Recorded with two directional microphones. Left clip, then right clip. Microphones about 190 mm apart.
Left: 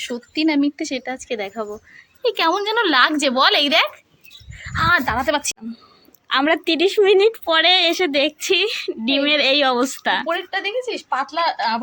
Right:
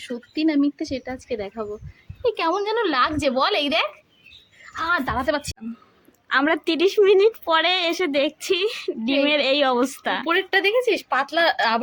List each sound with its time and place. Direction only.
0.0 s a woman's voice: 5° left (ahead or behind)
10.2 s speech: 60° right (ahead or behind)